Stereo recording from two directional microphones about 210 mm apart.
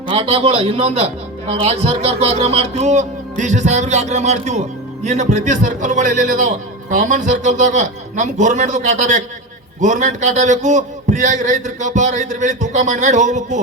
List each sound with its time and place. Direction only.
0.1 s a man's voice: 25° right (ahead or behind)